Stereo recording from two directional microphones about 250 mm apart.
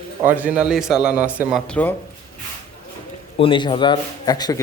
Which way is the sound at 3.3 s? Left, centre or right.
Centre.